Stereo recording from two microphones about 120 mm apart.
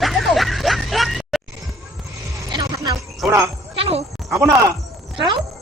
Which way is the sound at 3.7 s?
55° right (ahead or behind).